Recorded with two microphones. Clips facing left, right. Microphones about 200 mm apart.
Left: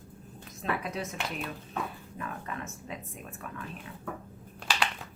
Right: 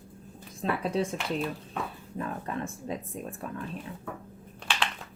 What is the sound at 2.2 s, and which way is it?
A woman's voice, 30° right (ahead or behind).